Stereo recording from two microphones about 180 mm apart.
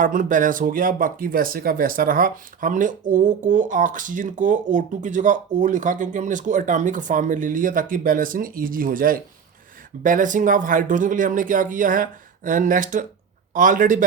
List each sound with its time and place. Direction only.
0.0 s speech: 50° right (ahead or behind)